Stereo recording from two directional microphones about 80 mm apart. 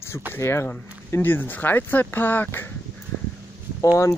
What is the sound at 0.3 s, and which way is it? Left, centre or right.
Speech, left.